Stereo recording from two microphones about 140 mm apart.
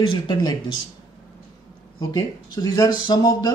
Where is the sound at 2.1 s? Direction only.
25° left (ahead or behind).